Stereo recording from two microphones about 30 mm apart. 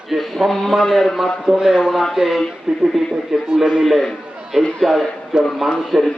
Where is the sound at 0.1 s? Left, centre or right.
Centre.